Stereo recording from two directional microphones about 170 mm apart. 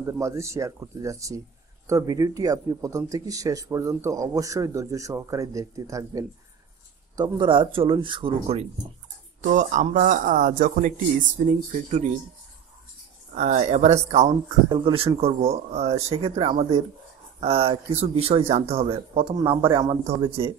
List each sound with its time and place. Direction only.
0.0 s speech: 15° right (ahead or behind); by 8.6 s 30° right (ahead or behind)
9.4 s a man's voice: 45° right (ahead or behind)
13.3 s speech: 45° right (ahead or behind)
14.7 s speech: 30° right (ahead or behind)